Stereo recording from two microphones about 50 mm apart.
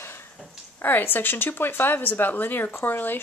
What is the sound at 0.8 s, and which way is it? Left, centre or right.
A woman's voice, left.